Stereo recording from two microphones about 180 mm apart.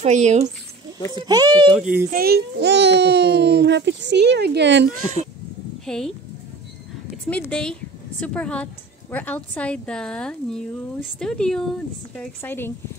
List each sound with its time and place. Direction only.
0.0 s speech: 40° right (ahead or behind)
1.1 s a child's voice: 25° right (ahead or behind)
1.8 s speech: 5° right (ahead or behind)
2.0 s a child's voice: 55° right (ahead or behind); by 4.8 s 70° right (ahead or behind)
5.9 s a woman's voice: 5° left (ahead or behind)
7.2 s a woman's voice: 5° left (ahead or behind)